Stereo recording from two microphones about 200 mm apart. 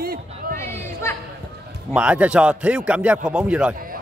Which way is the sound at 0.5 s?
10° left (ahead or behind).